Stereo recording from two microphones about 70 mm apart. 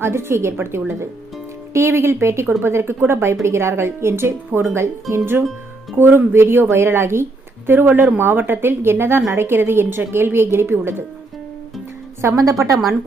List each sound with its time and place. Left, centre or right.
0.0 s a woman's voice: right
12.2 s a woman's voice: right